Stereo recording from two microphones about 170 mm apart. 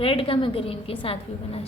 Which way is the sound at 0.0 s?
30° left (ahead or behind).